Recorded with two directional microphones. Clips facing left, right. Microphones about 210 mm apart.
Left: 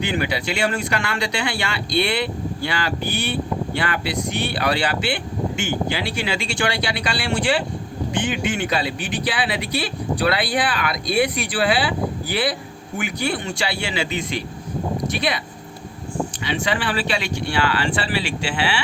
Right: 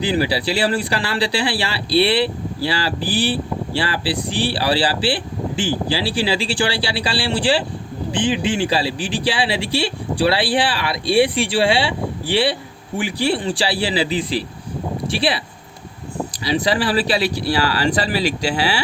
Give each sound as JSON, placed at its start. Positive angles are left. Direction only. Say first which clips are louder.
{"t": 0.0, "sound": "a man's voice", "louder": "right 4 dB", "side_deg": -30}
{"t": 16.4, "sound": "speech", "louder": "right 7 dB", "side_deg": -35}